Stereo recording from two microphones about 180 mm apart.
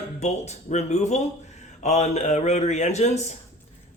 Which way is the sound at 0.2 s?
40° left (ahead or behind).